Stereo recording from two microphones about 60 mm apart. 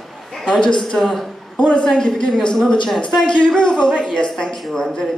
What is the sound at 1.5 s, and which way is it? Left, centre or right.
A woman's voice, left.